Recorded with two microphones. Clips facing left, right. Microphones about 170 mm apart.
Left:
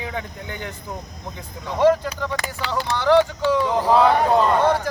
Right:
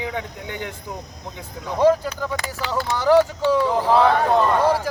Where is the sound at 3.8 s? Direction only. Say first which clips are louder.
Left 2 dB; 5° left (ahead or behind).